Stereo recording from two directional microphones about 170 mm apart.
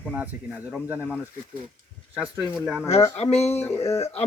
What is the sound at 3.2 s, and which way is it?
Speech, 40° left (ahead or behind).